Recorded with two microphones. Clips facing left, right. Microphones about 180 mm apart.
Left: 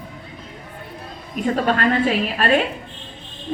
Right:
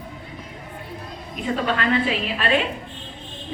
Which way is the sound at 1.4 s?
45° left (ahead or behind).